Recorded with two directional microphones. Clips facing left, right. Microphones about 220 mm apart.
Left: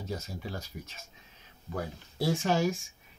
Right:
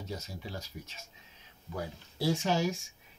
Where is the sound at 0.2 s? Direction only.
55° left (ahead or behind).